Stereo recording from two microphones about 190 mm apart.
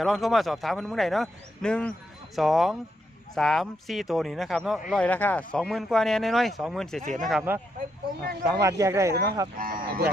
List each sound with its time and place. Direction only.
0.0 s speech: centre (ahead or behind)
8.6 s speech: 15° right (ahead or behind)
9.6 s speech: 50° right (ahead or behind)